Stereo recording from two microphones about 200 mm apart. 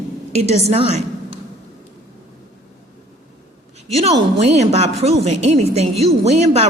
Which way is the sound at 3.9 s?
30° right (ahead or behind).